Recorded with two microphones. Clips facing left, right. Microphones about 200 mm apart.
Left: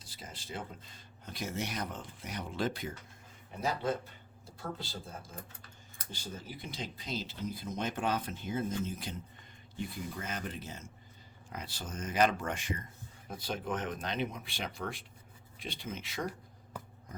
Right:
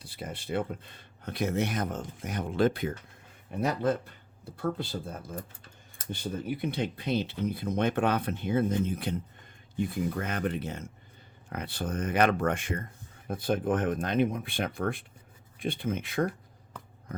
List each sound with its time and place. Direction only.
0.0 s speech: 60° right (ahead or behind)